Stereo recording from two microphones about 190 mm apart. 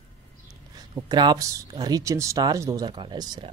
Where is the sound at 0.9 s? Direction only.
20° right (ahead or behind).